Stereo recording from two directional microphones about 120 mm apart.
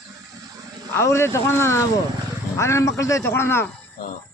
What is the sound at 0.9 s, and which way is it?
Speech, 25° left (ahead or behind).